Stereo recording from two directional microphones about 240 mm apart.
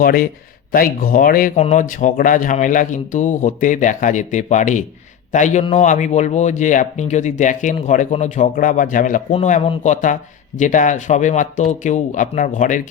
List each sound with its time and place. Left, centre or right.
0.0 s a man's voice: left